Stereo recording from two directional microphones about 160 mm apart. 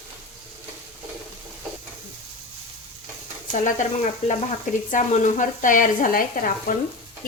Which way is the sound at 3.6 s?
50° left (ahead or behind).